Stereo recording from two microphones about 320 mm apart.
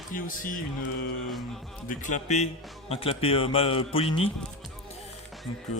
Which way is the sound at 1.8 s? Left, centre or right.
Left.